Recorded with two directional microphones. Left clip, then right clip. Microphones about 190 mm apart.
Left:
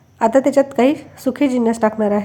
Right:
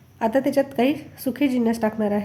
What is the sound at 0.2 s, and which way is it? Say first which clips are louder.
A woman's voice: left 7 dB; 15° left (ahead or behind).